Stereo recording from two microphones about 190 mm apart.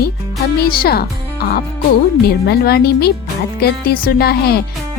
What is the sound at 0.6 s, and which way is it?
Speech, 55° left (ahead or behind).